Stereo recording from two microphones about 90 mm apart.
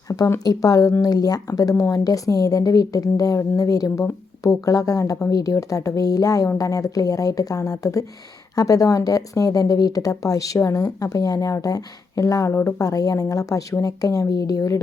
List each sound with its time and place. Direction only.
0.1 s speech: 40° left (ahead or behind)